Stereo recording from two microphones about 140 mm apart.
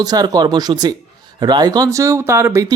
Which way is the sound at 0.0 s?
30° right (ahead or behind).